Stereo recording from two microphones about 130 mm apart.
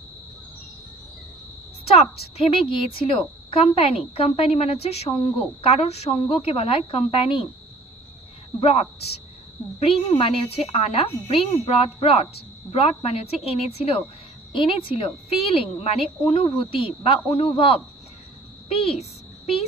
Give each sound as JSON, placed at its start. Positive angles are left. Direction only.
{"t": 2.3, "sound": "a woman's voice", "side_deg": 45}
{"t": 8.5, "sound": "a woman's voice", "side_deg": 50}
{"t": 14.5, "sound": "a woman's voice", "side_deg": 40}
{"t": 18.7, "sound": "a sound", "side_deg": 50}